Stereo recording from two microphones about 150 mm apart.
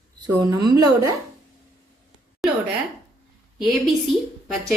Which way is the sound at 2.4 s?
Centre (ahead or behind).